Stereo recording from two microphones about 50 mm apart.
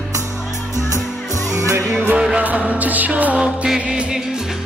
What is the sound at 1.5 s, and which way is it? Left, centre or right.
Music, right.